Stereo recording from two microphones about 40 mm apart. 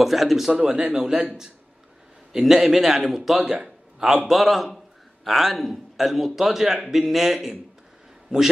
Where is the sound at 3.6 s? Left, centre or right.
Centre.